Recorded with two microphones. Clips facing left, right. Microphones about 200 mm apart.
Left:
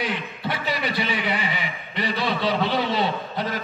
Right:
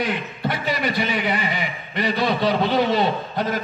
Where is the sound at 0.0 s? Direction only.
45° right (ahead or behind).